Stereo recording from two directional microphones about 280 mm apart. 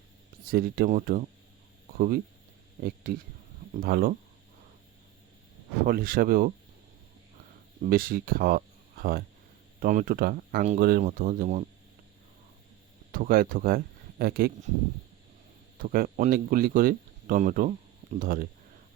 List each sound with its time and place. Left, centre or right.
0.5 s speech: right
5.8 s speech: right
7.9 s speech: right
13.1 s speech: right
15.8 s speech: right